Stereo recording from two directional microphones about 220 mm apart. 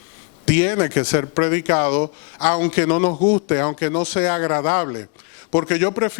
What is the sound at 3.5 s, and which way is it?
A man's voice, 20° left (ahead or behind).